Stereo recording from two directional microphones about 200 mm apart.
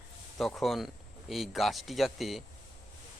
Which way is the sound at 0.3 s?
Centre (ahead or behind).